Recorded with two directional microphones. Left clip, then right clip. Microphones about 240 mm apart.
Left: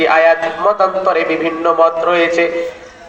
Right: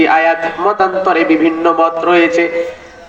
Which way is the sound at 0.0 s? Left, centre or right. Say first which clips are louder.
Even; right.